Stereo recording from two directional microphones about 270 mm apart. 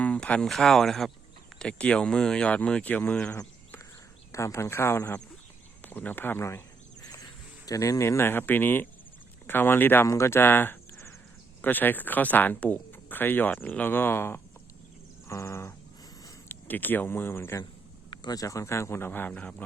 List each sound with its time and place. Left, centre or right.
0.0 s speech: centre
7.6 s speech: centre